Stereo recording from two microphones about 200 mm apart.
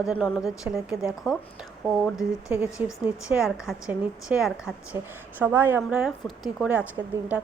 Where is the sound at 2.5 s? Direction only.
10° right (ahead or behind).